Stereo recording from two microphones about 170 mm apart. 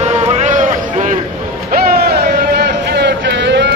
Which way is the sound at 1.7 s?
65° right (ahead or behind).